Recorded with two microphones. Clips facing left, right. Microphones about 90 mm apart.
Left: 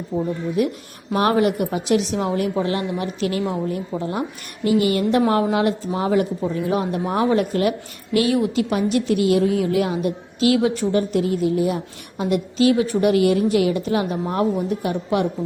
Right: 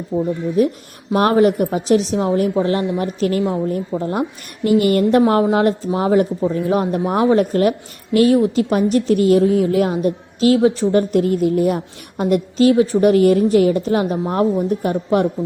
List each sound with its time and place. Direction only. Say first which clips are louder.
0.1 s speech: right 4 dB; 15° right (ahead or behind)
0.6 s a woman's voice: right 7 dB; 35° right (ahead or behind)
5.2 s a woman's voice: right 4 dB; 30° right (ahead or behind)
11.1 s a woman's voice: right 4 dB; 50° right (ahead or behind)